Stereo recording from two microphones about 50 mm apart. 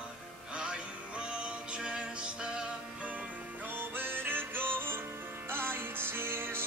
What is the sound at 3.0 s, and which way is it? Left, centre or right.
Music, right.